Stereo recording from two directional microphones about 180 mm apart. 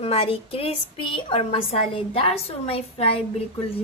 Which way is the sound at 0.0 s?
30° left (ahead or behind).